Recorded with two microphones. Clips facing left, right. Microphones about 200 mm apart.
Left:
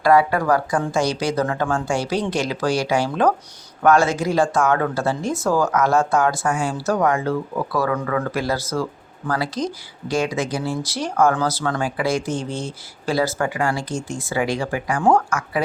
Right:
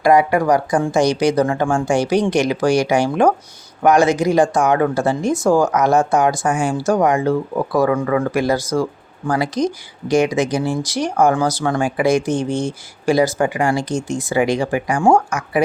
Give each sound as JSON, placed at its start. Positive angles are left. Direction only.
{"t": 0.0, "sound": "speech", "side_deg": -15}